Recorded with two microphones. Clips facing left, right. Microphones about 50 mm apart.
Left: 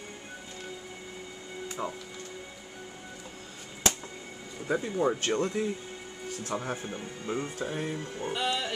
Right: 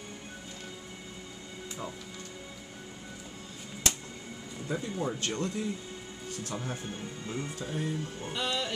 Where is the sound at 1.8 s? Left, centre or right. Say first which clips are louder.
Left 5 dB; left.